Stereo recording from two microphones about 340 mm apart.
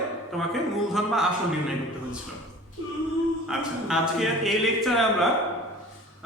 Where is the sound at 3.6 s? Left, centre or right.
Centre.